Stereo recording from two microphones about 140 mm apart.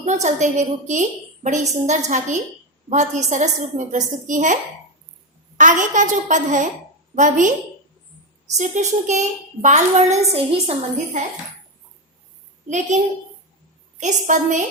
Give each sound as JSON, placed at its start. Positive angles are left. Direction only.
{"t": 0.0, "sound": "a woman's voice", "side_deg": -60}
{"t": 5.5, "sound": "a woman's voice", "side_deg": -65}
{"t": 8.5, "sound": "a woman's voice", "side_deg": -55}
{"t": 12.6, "sound": "a woman's voice", "side_deg": -55}
{"t": 14.0, "sound": "a woman's voice", "side_deg": -60}